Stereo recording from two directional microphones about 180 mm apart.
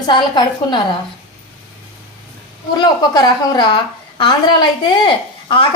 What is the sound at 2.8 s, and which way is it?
A woman's voice, 25° left (ahead or behind).